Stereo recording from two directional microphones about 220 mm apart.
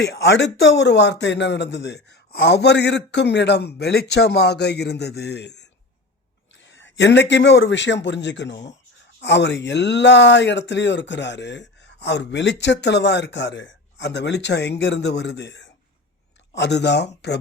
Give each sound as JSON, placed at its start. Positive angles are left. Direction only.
{"t": 0.0, "sound": "speech", "side_deg": 50}
{"t": 6.7, "sound": "speech", "side_deg": 55}